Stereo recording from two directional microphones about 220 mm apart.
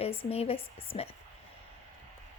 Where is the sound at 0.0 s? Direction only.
25° left (ahead or behind).